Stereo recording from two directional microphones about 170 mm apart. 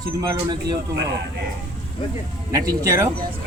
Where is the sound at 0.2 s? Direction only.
20° right (ahead or behind).